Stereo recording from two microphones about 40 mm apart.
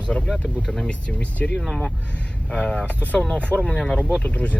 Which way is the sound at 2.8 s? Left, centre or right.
Left.